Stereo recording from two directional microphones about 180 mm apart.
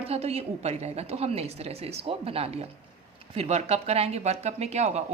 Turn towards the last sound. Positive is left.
turn(degrees=-40)  # may be behind; listen again after turning